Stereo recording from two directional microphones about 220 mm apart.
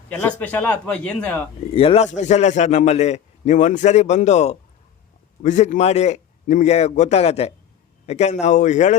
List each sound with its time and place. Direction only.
0.1 s a man's voice: 10° left (ahead or behind)
1.7 s a man's voice: 25° left (ahead or behind)